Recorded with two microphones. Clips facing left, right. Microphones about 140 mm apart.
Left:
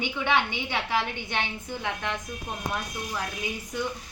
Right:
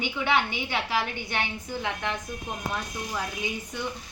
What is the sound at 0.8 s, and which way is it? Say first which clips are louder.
Speech: left 1 dB; 20° left (ahead or behind).